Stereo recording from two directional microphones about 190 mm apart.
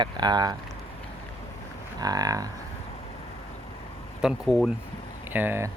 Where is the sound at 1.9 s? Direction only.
20° right (ahead or behind).